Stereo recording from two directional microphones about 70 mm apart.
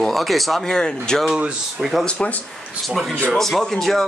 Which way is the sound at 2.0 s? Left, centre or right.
Centre.